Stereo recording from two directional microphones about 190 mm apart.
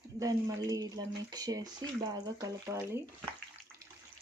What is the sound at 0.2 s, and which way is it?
Speech, 20° right (ahead or behind).